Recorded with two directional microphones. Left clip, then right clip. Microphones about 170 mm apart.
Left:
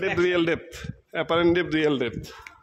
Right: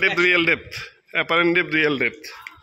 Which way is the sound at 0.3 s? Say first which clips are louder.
Right 6 dB; 15° left (ahead or behind).